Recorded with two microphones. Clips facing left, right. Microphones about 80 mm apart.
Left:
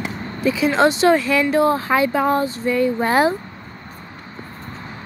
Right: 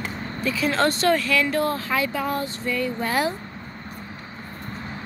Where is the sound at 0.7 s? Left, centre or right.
Centre.